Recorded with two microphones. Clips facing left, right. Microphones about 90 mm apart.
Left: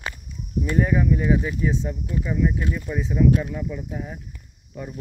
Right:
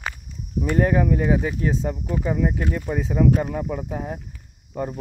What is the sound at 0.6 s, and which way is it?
Speech, 60° right (ahead or behind).